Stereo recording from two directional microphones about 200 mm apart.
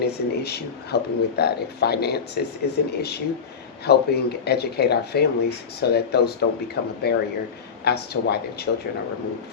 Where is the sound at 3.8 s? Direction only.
55° left (ahead or behind).